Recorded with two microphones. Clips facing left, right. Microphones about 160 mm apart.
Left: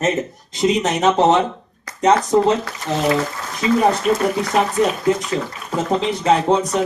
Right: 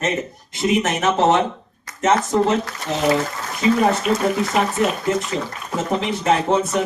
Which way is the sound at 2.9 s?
20° left (ahead or behind).